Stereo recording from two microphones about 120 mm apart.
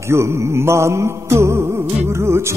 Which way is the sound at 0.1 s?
25° right (ahead or behind).